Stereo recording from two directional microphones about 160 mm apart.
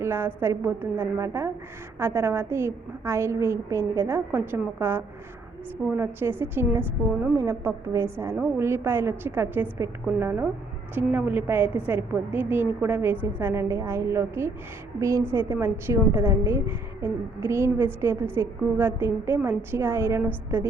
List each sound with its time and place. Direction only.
0.0 s a woman's voice: 15° right (ahead or behind)